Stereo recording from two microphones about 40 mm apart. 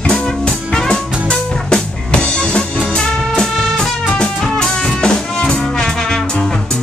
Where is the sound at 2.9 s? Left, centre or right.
Centre.